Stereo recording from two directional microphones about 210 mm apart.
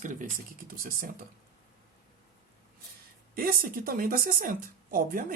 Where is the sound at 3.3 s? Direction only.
45° right (ahead or behind).